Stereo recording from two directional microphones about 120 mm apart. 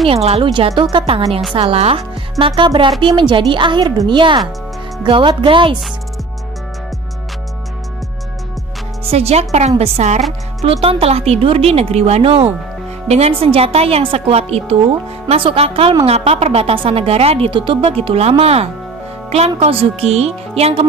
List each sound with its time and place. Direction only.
0.0 s speech: 55° right (ahead or behind)
9.1 s a woman's voice: 60° right (ahead or behind)
10.6 s a woman's voice: 55° right (ahead or behind)